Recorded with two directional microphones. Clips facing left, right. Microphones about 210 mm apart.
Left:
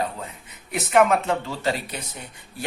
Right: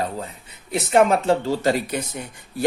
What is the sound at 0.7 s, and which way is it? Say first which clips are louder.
Speech: right 2 dB; 30° right (ahead or behind).